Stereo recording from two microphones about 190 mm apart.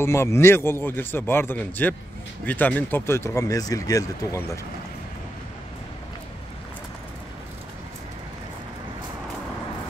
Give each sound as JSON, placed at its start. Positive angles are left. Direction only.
{"t": 0.0, "sound": "speech", "side_deg": 15}